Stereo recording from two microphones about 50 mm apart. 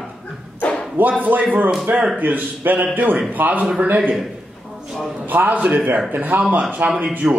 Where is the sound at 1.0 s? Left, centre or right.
Right.